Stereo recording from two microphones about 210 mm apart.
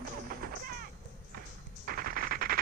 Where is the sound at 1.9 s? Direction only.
45° right (ahead or behind).